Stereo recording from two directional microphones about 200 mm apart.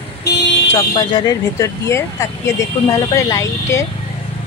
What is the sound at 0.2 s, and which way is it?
Vehicle, 55° left (ahead or behind).